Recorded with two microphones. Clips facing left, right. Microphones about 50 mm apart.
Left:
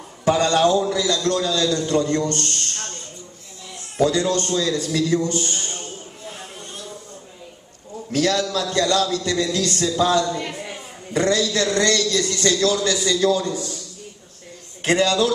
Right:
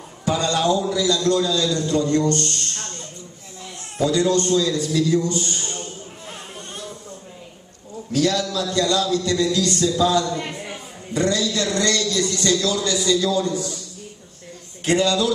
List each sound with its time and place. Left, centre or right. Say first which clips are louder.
0.2 s a man's voice: left 4 dB; left
2.4 s speech: even; right
4.0 s a man's voice: even; left
8.1 s a man's voice: even; left
9.8 s a sound: left 1 dB; left
11.1 s a man's voice: left 2 dB; left
14.9 s a man's voice: left 1 dB; left